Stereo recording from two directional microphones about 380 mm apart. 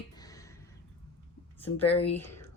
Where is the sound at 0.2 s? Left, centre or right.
Centre.